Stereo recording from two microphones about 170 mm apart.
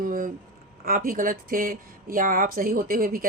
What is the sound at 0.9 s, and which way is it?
Speech, 55° right (ahead or behind).